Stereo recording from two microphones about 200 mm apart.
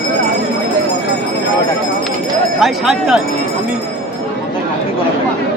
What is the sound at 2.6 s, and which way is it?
Speech, centre (ahead or behind).